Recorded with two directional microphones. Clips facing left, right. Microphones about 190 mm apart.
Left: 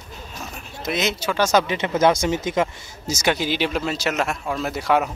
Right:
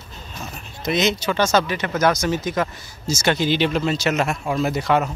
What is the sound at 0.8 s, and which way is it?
Speech, 5° left (ahead or behind).